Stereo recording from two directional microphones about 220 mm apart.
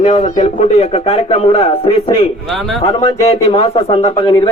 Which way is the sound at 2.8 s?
25° left (ahead or behind).